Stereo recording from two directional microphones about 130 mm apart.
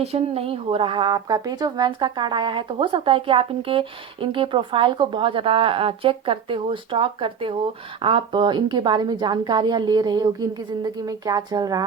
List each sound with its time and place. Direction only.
0.0 s speech: 50° right (ahead or behind); by 11.9 s 30° right (ahead or behind)